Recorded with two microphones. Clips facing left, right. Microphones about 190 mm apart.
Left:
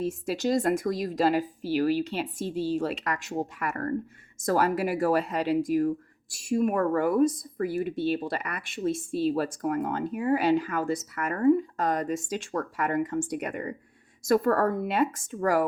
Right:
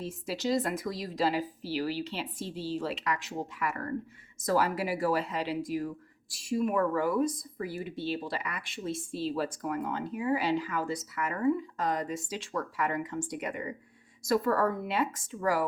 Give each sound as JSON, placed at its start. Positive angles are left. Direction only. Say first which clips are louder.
{"t": 0.0, "sound": "speech", "louder": "left 6 dB", "side_deg": 50}